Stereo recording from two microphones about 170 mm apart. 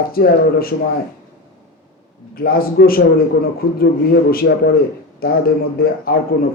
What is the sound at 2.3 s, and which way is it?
Speech, 60° left (ahead or behind).